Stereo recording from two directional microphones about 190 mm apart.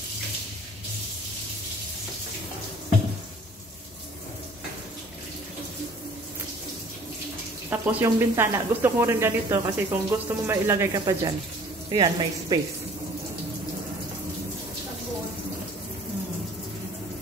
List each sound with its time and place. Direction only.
7.7 s speech: 10° right (ahead or behind)